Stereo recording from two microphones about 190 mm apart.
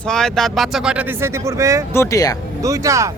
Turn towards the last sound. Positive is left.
turn(degrees=-15)  # may be behind; listen again after turning